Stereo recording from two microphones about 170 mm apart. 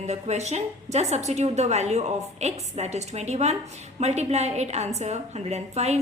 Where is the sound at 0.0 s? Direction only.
40° right (ahead or behind).